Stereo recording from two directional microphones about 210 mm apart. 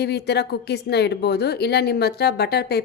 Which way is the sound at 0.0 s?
50° left (ahead or behind).